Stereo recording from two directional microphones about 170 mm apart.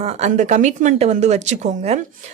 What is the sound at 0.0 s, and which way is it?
A woman's voice, 45° right (ahead or behind).